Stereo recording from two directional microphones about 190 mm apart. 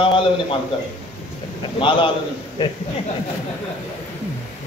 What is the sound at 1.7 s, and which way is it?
Speech, 25° left (ahead or behind).